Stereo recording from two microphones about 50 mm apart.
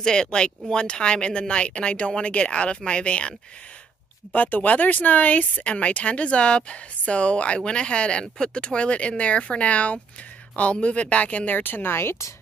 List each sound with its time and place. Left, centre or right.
0.0 s speech: centre; by 12.3 s left